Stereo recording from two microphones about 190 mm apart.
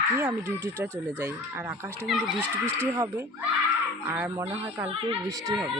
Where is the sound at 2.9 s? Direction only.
15° right (ahead or behind).